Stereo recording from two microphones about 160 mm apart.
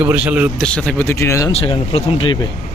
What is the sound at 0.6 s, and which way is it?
Speech, 5° left (ahead or behind).